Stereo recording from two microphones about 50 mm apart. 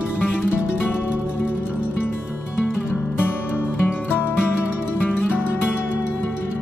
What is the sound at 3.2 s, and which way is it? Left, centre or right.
Music, left.